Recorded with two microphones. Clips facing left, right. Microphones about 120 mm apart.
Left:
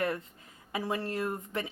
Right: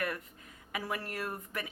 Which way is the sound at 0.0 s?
25° left (ahead or behind).